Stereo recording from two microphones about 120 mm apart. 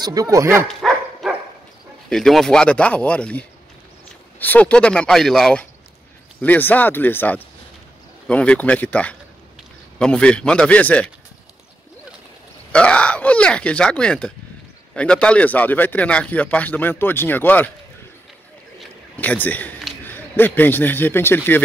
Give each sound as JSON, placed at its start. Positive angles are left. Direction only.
{"t": 0.0, "sound": "speech", "side_deg": -30}
{"t": 0.7, "sound": "dog", "side_deg": 0}
{"t": 2.0, "sound": "speech", "side_deg": 5}
{"t": 12.7, "sound": "a sound", "side_deg": 10}
{"t": 15.0, "sound": "speech", "side_deg": 10}
{"t": 19.1, "sound": "a man's voice", "side_deg": 15}